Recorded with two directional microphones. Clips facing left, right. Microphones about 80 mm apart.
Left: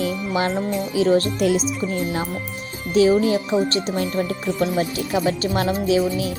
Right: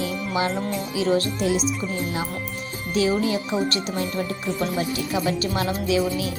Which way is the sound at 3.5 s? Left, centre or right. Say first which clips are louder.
Left 4 dB; left.